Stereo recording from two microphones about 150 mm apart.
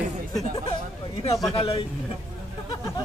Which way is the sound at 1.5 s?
40° left (ahead or behind).